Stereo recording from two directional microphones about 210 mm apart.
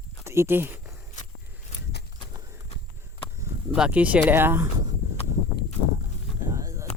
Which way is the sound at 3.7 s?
5° right (ahead or behind).